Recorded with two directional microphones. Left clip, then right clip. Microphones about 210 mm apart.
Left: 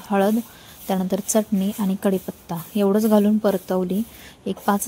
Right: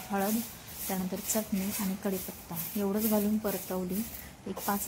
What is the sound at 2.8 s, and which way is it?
A woman's voice, 45° left (ahead or behind).